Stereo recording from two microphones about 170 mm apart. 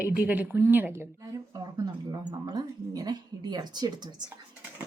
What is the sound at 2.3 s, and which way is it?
Speech, 25° right (ahead or behind).